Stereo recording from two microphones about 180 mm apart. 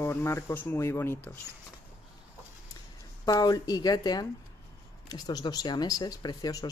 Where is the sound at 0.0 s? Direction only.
15° left (ahead or behind).